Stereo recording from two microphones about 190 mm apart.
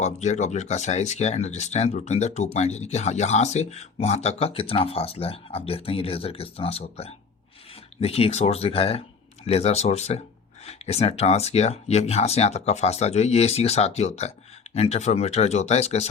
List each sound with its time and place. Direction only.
0.0 s speech: 40° left (ahead or behind)